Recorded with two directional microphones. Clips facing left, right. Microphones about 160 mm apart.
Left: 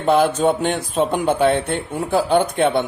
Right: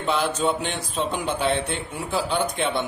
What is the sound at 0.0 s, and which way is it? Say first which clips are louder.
Speech: left 7 dB; 50° left (ahead or behind).